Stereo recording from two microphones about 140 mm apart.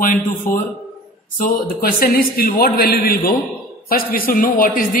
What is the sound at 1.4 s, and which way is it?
Speech, 90° left.